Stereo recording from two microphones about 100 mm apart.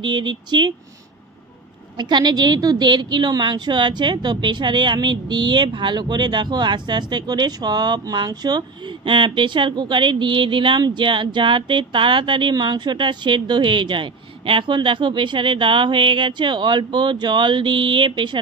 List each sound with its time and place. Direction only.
0.0 s speech: 50° right (ahead or behind)
2.0 s speech: 50° right (ahead or behind)
9.0 s speech: 55° right (ahead or behind)